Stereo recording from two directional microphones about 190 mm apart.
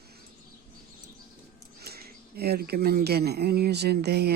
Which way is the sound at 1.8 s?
55° right (ahead or behind).